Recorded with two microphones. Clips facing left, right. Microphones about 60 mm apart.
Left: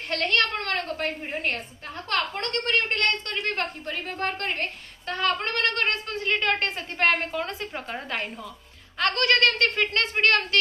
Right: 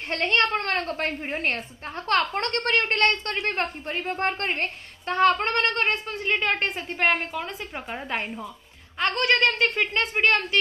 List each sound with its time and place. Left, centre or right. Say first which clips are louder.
0.1 s a woman's voice: right 2 dB; right
5.8 s a woman's voice: right 1 dB; centre